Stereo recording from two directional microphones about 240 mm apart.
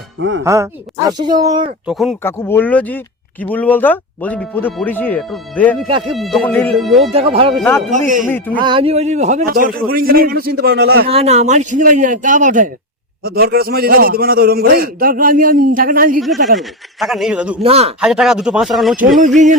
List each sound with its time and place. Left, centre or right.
0.2 s speech: right
0.4 s speech: centre
1.9 s a man's voice: centre
7.1 s speech: right
7.5 s speech: centre
7.9 s a man's voice: right
8.3 s speech: centre
8.6 s a man's voice: right
11.1 s a man's voice: right
16.6 s a man's voice: centre
17.6 s speech: right
18.0 s a man's voice: centre